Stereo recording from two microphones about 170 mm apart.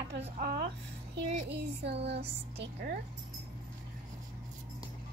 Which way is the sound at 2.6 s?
65° right (ahead or behind).